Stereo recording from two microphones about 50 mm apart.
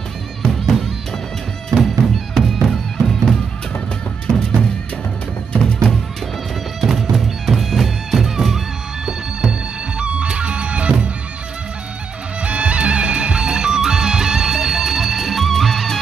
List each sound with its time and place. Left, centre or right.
0.5 s music: centre
6.8 s music: centre
9.0 s music: centre
12.4 s music: right; by 16.0 s centre